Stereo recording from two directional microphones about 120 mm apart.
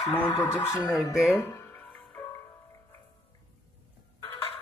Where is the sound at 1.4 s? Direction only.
20° left (ahead or behind).